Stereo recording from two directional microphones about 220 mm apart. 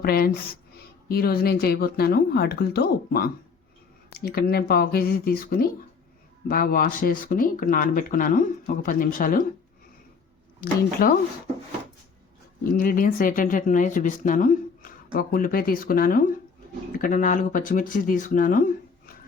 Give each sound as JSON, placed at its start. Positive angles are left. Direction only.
{"t": 0.0, "sound": "speech", "side_deg": 45}
{"t": 11.0, "sound": "speech", "side_deg": 40}
{"t": 12.7, "sound": "speech", "side_deg": 40}